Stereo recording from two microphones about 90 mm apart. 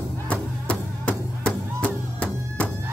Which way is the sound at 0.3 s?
15° left (ahead or behind).